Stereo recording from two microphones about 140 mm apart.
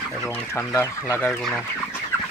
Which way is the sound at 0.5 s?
20° left (ahead or behind).